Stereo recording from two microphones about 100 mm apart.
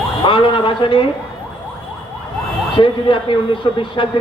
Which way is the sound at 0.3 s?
60° left (ahead or behind).